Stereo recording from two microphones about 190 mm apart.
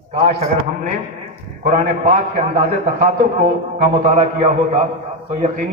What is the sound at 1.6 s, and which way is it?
A man's voice, 40° right (ahead or behind).